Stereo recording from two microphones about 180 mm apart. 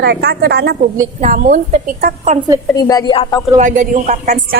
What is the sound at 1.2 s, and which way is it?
A woman's voice, 45° right (ahead or behind).